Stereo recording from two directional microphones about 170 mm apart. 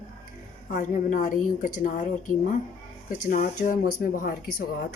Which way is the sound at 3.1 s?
50° left (ahead or behind).